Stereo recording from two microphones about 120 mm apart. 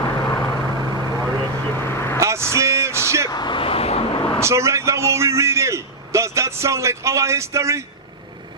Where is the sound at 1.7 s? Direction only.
20° left (ahead or behind).